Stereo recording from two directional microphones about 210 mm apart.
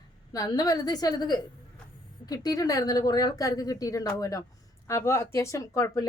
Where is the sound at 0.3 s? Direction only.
15° left (ahead or behind).